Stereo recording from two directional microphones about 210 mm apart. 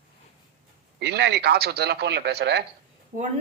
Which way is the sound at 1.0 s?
55° right (ahead or behind).